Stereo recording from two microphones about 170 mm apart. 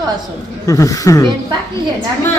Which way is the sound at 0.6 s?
20° left (ahead or behind).